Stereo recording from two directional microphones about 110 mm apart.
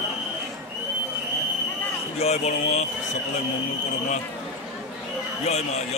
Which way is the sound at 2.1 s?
75° left (ahead or behind).